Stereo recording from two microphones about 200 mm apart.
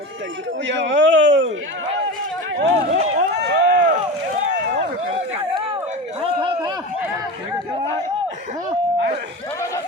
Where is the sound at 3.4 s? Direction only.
55° right (ahead or behind).